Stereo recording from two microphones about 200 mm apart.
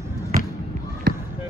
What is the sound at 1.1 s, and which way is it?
Fireworks, 55° right (ahead or behind).